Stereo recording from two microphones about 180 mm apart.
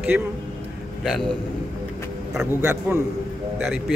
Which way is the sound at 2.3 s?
10° right (ahead or behind).